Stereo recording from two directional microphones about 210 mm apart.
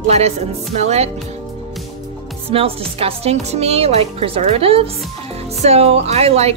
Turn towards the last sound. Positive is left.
turn(degrees=-30)  # may be behind; listen again after turning